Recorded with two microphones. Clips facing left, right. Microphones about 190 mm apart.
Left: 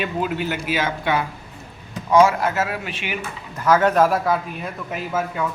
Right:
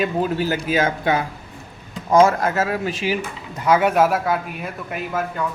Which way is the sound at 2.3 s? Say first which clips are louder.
Right 2 dB; 40° right (ahead or behind).